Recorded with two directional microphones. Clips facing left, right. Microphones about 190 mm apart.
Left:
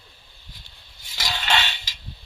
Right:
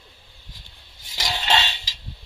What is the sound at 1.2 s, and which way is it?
Music, 20° right (ahead or behind).